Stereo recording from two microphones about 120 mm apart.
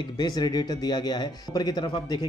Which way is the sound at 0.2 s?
35° left (ahead or behind).